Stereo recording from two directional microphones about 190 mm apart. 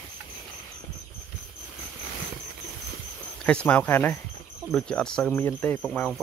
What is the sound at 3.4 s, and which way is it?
Speech, 5° left (ahead or behind).